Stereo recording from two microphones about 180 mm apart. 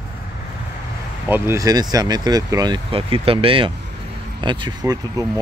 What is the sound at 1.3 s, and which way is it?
Speech, 15° right (ahead or behind).